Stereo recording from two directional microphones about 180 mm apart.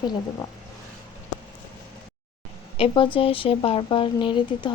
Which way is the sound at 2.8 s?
30° left (ahead or behind).